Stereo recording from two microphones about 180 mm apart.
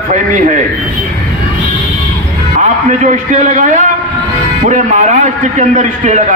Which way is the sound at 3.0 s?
40° right (ahead or behind).